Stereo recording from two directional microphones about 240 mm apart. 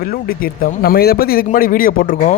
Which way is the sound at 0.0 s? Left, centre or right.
Left.